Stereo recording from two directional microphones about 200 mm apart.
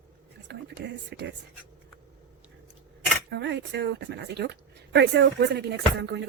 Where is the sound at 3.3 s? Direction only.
60° right (ahead or behind).